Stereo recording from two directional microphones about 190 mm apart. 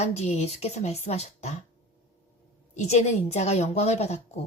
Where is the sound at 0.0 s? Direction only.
35° left (ahead or behind).